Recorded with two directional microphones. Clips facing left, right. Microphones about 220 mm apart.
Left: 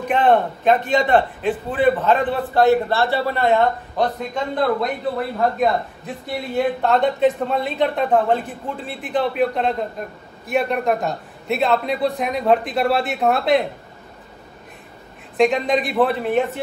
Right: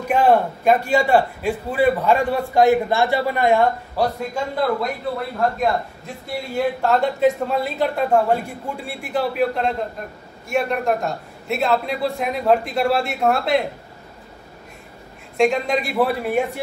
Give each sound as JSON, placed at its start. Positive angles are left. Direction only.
{"t": 0.1, "sound": "a man's voice", "side_deg": -10}
{"t": 15.3, "sound": "a man's voice", "side_deg": 0}